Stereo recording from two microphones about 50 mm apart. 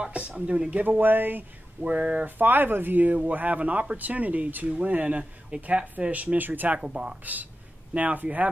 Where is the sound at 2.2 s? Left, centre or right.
Right.